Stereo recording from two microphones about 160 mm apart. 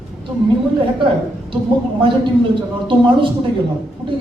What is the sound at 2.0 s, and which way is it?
Speech, 30° right (ahead or behind).